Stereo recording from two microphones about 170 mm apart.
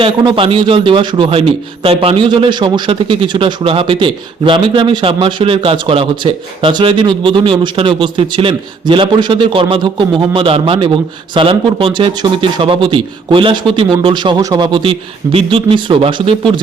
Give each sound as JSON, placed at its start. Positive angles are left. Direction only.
{"t": 0.0, "sound": "a man's voice", "side_deg": -30}